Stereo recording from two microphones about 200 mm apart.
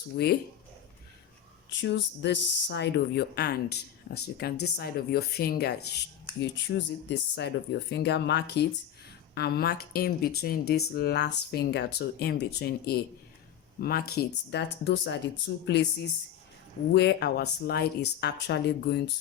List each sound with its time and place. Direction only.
0.2 s speech: 55° left (ahead or behind)
1.7 s speech: 60° left (ahead or behind)
16.9 s speech: 55° left (ahead or behind)